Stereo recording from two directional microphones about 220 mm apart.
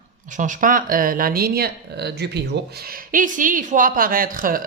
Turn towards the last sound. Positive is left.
turn(degrees=-40)  # may be behind; listen again after turning